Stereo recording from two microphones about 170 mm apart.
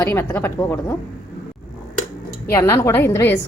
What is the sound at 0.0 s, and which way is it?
Speech, 15° left (ahead or behind).